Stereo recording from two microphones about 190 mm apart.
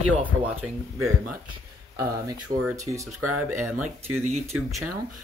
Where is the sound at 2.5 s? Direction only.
50° right (ahead or behind).